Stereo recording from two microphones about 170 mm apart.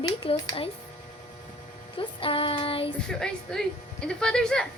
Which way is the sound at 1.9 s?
30° left (ahead or behind).